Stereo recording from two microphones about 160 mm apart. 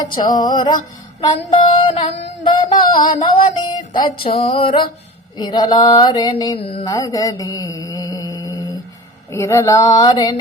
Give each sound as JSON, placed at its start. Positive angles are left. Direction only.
{"t": 0.2, "sound": "mantra", "side_deg": 25}
{"t": 1.5, "sound": "child singing", "side_deg": 35}
{"t": 2.5, "sound": "child singing", "side_deg": 30}
{"t": 5.4, "sound": "mantra", "side_deg": 25}
{"t": 6.8, "sound": "mantra", "side_deg": 20}